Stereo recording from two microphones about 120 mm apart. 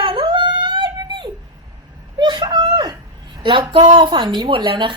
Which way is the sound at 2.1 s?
40° right (ahead or behind).